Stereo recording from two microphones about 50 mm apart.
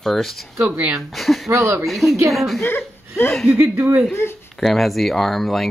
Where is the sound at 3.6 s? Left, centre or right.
Right.